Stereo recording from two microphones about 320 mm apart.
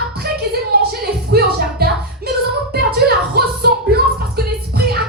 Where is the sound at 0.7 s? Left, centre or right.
Right.